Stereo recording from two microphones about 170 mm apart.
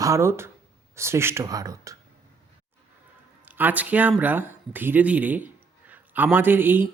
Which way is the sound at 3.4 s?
10° right (ahead or behind).